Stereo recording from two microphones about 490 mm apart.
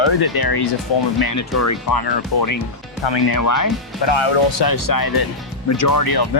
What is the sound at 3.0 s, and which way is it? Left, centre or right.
Speech, left.